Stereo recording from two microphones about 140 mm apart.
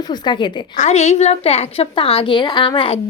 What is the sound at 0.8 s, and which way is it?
A woman's voice, 55° left (ahead or behind).